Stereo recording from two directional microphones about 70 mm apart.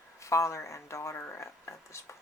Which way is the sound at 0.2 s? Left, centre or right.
Left.